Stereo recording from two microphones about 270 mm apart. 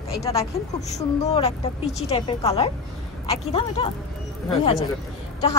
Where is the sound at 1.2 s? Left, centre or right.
Left.